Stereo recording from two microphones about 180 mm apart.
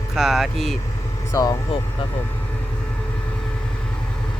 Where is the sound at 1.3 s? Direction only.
15° left (ahead or behind).